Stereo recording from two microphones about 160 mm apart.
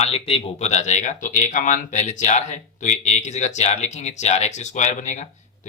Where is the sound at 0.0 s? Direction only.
35° left (ahead or behind).